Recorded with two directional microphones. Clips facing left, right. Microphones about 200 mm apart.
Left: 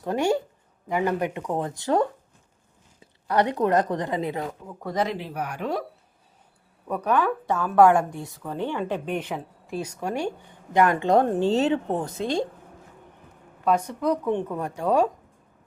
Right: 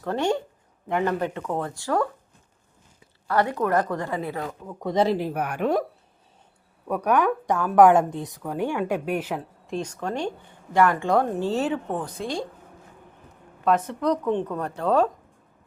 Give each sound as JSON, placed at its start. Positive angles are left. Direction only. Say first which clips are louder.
{"t": 0.0, "sound": "a woman's voice", "louder": "left 1 dB", "side_deg": 15}
{"t": 3.2, "sound": "a woman's voice", "louder": "left 1 dB", "side_deg": 20}
{"t": 4.8, "sound": "speech", "louder": "right 4 dB", "side_deg": -20}
{"t": 5.0, "sound": "speech", "louder": "right 6 dB", "side_deg": -45}
{"t": 6.8, "sound": "a woman's voice", "louder": "right 2 dB", "side_deg": -10}
{"t": 13.7, "sound": "speech", "louder": "right 1 dB", "side_deg": 0}
{"t": 14.1, "sound": "a woman's voice", "louder": "right 1 dB", "side_deg": 10}